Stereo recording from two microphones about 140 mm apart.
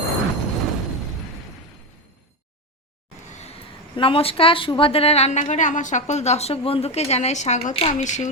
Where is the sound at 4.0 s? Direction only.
40° left (ahead or behind).